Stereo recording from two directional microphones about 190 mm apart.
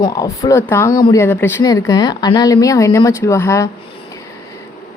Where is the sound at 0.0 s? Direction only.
20° left (ahead or behind).